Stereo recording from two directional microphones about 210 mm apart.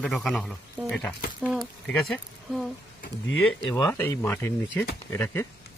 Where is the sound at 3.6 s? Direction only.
20° left (ahead or behind).